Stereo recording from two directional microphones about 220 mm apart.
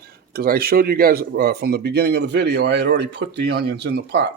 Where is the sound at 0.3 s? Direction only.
45° right (ahead or behind).